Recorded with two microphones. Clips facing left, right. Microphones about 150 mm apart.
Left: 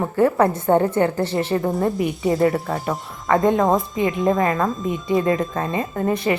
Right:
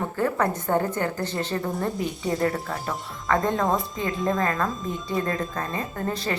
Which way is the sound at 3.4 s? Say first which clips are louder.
Left 7 dB; 20° left (ahead or behind).